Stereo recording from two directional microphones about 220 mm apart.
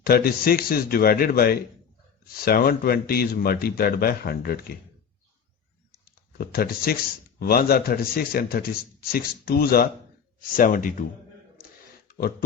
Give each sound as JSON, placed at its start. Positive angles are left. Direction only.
{"t": 0.0, "sound": "speech", "side_deg": 45}
{"t": 5.9, "sound": "speech", "side_deg": 45}
{"t": 12.0, "sound": "speech", "side_deg": 45}